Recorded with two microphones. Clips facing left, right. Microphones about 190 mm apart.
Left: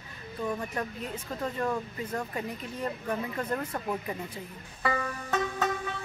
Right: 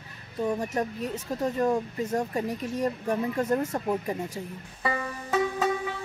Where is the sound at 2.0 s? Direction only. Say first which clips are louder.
Right 6 dB; 40° right (ahead or behind).